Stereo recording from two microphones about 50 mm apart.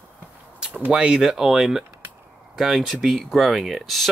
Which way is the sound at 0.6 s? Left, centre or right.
Right.